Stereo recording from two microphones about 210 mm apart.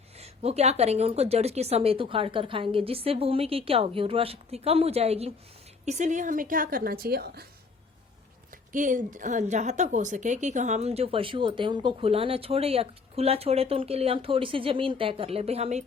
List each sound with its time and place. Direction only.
0.2 s a woman's voice: 30° right (ahead or behind); by 7.4 s 45° right (ahead or behind)
8.7 s a woman's voice: 40° right (ahead or behind)